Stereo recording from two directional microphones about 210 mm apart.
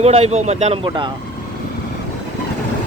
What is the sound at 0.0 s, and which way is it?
Speech, 30° right (ahead or behind).